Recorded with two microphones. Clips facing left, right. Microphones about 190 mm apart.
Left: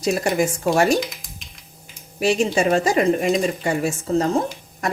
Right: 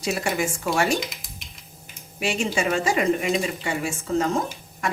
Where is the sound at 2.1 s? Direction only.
40° left (ahead or behind).